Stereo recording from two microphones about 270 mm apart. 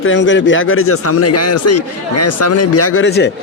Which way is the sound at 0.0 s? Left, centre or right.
Left.